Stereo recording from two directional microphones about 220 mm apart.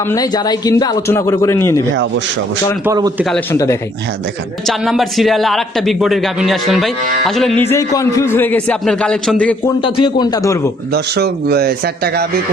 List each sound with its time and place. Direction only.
0.1 s a man's voice: 15° left (ahead or behind)
2.8 s a man's voice: 10° right (ahead or behind)
3.5 s a man's voice: 15° left (ahead or behind)
4.6 s a man's voice: centre (ahead or behind)
9.8 s a man's voice: 20° left (ahead or behind)
10.9 s a man's voice: 45° right (ahead or behind)